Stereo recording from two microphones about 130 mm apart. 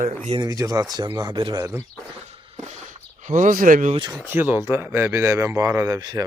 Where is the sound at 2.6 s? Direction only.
70° right (ahead or behind); by 3.9 s 90° right.